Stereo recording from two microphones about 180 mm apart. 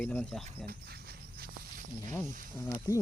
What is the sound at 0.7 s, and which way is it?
Speech, 60° right (ahead or behind).